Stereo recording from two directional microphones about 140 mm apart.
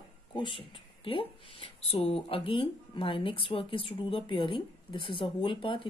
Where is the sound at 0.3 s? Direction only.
35° left (ahead or behind).